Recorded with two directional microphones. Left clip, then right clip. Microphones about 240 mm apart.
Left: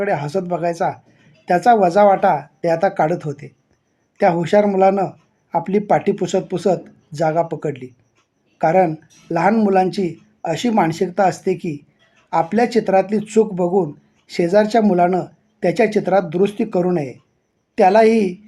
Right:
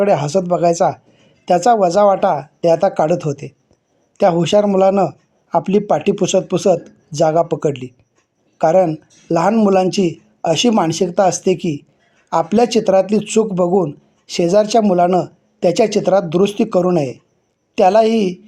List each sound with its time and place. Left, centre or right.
0.0 s speech: right
8.9 s speech: right